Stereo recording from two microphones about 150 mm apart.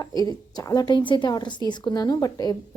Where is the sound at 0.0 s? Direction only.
25° left (ahead or behind).